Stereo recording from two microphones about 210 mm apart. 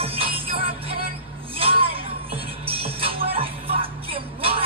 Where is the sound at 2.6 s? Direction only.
25° right (ahead or behind).